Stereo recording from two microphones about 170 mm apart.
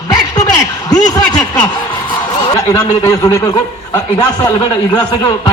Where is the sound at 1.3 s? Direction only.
25° left (ahead or behind).